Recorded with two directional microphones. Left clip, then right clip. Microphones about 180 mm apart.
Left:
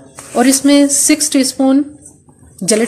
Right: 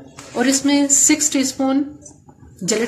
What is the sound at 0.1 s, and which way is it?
A woman's voice, 40° left (ahead or behind).